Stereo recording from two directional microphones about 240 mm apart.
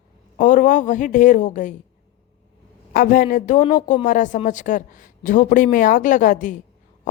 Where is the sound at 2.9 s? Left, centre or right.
Left.